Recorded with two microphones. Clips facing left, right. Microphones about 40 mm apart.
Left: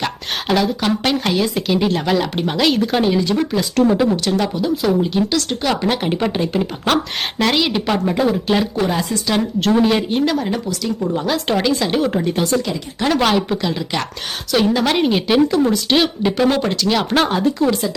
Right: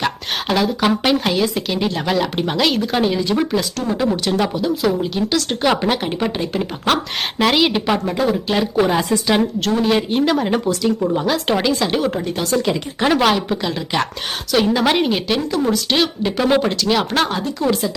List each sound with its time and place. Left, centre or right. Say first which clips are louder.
0.0 s a woman's voice: right 1 dB; centre
3.8 s speech: left 5 dB; centre
4.1 s a woman's voice: even; centre
5.5 s speech: right 2 dB; centre
5.9 s a woman's voice: left 1 dB; centre
8.7 s speech: right 3 dB; centre
9.6 s speech: left 3 dB; centre
9.9 s a woman's voice: right 1 dB; centre
12.1 s a woman's voice: left 2 dB; centre
15.4 s a woman's voice: left 4 dB; centre